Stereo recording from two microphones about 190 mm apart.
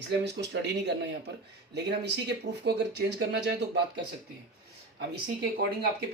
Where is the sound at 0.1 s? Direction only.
65° right (ahead or behind).